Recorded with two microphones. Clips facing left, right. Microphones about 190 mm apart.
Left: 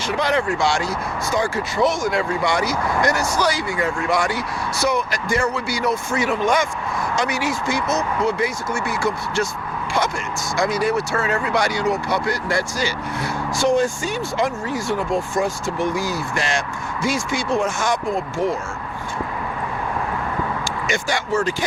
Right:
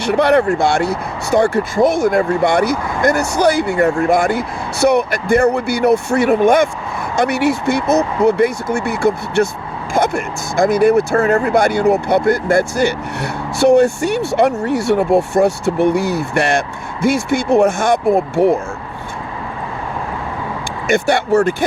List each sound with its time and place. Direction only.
0.0 s speech: 65° right (ahead or behind)
20.8 s speech: 60° right (ahead or behind)